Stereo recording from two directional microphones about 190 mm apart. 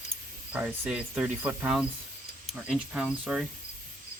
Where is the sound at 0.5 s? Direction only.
5° right (ahead or behind).